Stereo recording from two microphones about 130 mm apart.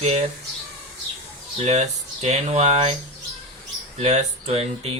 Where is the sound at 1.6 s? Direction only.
60° right (ahead or behind).